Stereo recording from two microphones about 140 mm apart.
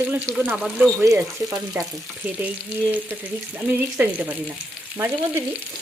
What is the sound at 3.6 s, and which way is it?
Speech, 15° right (ahead or behind).